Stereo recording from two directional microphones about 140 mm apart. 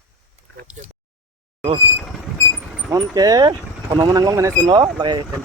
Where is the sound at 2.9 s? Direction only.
25° right (ahead or behind).